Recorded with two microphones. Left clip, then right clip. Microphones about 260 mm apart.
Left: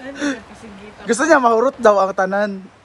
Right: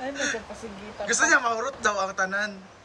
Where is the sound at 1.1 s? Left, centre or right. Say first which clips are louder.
Left 8 dB; centre.